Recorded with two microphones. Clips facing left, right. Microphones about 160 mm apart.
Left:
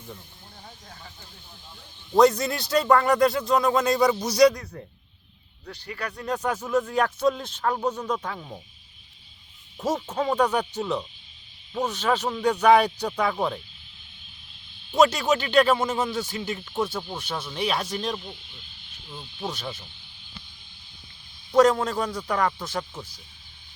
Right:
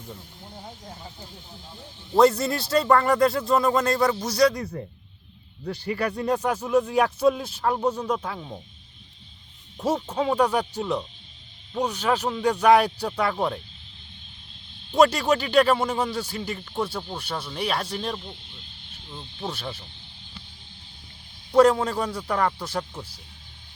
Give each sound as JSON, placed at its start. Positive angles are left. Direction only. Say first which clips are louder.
{"t": 0.1, "sound": "speech", "louder": "right 2 dB", "side_deg": -15}
{"t": 2.1, "sound": "speech", "louder": "even", "side_deg": -5}
{"t": 4.0, "sound": "speech", "louder": "left 1 dB", "side_deg": 15}
{"t": 4.5, "sound": "speech", "louder": "right 7 dB", "side_deg": -10}
{"t": 9.7, "sound": "speech", "louder": "right 1 dB", "side_deg": -10}
{"t": 11.9, "sound": "speech", "louder": "even", "side_deg": -10}
{"t": 13.3, "sound": "speech", "louder": "right 1 dB", "side_deg": 5}
{"t": 14.8, "sound": "speech", "louder": "right 1 dB", "side_deg": 10}
{"t": 15.4, "sound": "speech", "louder": "even", "side_deg": -10}
{"t": 15.7, "sound": "speech", "louder": "even", "side_deg": 5}
{"t": 21.5, "sound": "speech", "louder": "right 1 dB", "side_deg": -5}